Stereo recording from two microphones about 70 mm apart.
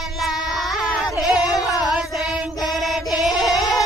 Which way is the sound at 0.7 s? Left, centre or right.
Centre.